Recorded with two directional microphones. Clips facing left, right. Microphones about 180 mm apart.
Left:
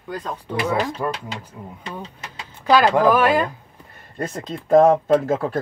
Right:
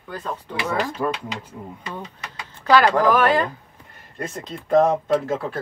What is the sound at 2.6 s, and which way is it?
Speech, 15° left (ahead or behind).